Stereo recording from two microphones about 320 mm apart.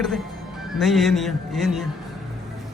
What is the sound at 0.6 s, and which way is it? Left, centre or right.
Speech, centre.